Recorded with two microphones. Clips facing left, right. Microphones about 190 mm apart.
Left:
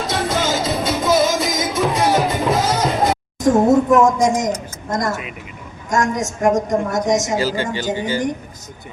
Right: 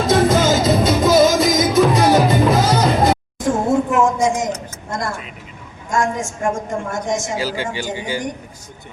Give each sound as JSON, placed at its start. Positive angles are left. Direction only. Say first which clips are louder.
{"t": 0.1, "sound": "music", "louder": "right 7 dB", "side_deg": -45}
{"t": 3.7, "sound": "a sound", "louder": "left 1 dB", "side_deg": 40}
{"t": 4.9, "sound": "a woman's voice", "louder": "left 4 dB", "side_deg": 40}
{"t": 7.4, "sound": "speech", "louder": "left 3 dB", "side_deg": -10}